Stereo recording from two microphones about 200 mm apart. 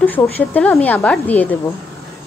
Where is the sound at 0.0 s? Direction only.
10° left (ahead or behind).